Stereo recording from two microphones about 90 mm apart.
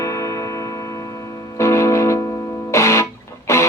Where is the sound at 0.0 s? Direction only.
35° left (ahead or behind).